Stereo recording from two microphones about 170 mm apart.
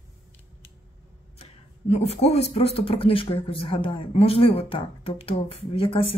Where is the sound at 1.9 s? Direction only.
40° left (ahead or behind).